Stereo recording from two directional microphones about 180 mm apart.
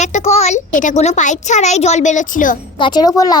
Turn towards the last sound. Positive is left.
turn(degrees=20)  # may be behind; listen again after turning